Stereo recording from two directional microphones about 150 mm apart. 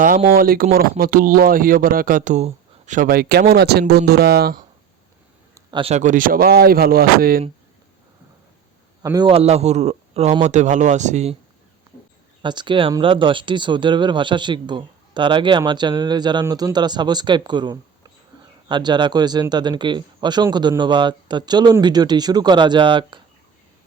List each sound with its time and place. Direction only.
0.3 s speech: 75° right (ahead or behind)
5.7 s speech: 45° right (ahead or behind); by 7.4 s 80° right
9.2 s speech: 40° right (ahead or behind)
12.4 s speech: 30° right (ahead or behind)